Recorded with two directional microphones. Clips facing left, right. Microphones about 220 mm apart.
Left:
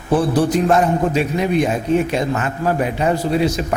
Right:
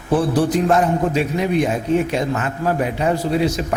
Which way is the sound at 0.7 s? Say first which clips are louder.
Left 1 dB; 20° left (ahead or behind).